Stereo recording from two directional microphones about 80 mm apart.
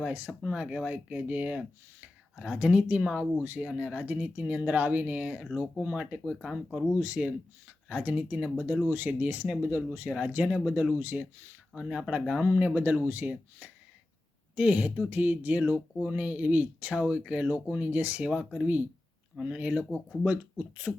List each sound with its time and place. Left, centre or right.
0.0 s speech: right
5.4 s speech: centre
11.7 s speech: centre
12.5 s speech: right